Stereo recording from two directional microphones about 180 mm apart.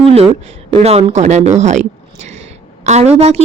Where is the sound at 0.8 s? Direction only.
35° right (ahead or behind).